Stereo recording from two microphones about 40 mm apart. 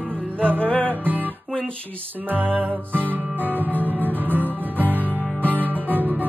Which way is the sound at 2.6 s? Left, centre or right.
Right.